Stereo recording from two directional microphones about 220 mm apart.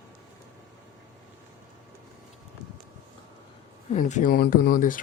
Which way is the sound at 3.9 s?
35° left (ahead or behind).